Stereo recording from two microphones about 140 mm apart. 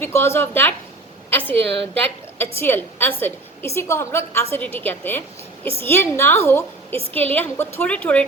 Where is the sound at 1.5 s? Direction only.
45° right (ahead or behind).